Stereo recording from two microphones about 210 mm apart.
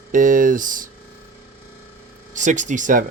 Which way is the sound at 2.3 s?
35° right (ahead or behind).